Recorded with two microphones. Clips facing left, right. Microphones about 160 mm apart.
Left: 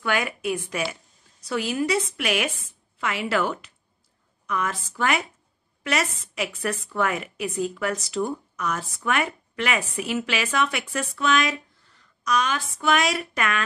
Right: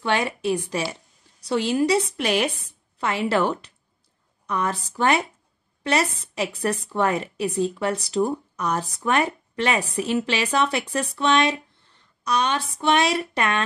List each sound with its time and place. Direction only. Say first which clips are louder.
0.0 s a woman's voice: right 3 dB; 30° right (ahead or behind)